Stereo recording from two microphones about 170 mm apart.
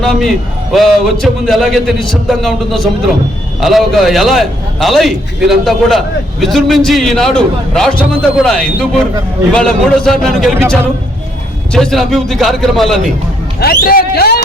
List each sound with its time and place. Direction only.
0.0 s a man's voice: centre (ahead or behind)
11.7 s a man's voice: centre (ahead or behind)
13.6 s speech: 65° left (ahead or behind)